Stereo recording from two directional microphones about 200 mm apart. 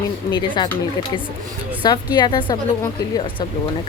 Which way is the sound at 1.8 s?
20° left (ahead or behind).